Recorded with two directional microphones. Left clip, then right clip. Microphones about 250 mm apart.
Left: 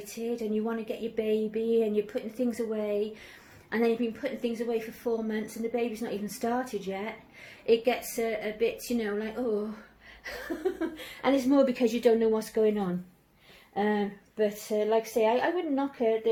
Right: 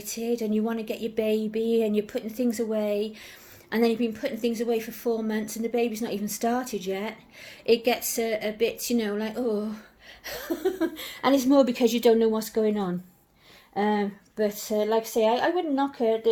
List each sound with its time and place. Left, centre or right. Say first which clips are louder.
0.0 s a woman's voice: right 4 dB; right